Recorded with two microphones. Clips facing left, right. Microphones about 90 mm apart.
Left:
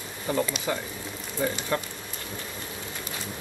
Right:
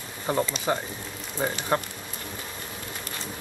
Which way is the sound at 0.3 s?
35° right (ahead or behind).